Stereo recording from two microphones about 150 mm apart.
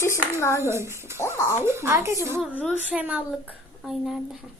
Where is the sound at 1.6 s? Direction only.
15° right (ahead or behind).